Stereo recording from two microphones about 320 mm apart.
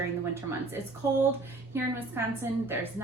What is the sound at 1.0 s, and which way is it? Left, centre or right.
Speech, centre.